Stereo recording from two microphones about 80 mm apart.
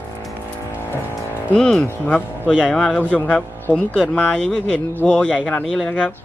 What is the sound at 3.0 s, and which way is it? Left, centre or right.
Speech, centre.